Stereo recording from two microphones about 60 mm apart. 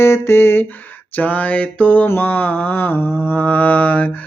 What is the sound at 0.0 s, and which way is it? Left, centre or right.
Music, left.